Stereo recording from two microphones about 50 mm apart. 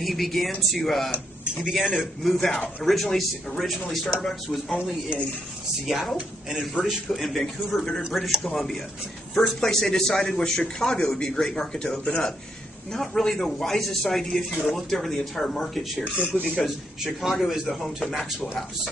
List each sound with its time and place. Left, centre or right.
0.0 s a man's voice: centre
1.6 s a man's voice: centre
5.9 s a man's voice: centre
9.4 s a man's voice: centre
16.0 s speech: right
16.6 s a man's voice: centre